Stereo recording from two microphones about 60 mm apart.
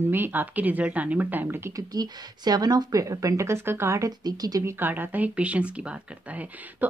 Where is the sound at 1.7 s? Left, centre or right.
Right.